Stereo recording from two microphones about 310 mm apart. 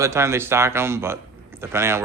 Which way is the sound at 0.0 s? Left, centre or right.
Centre.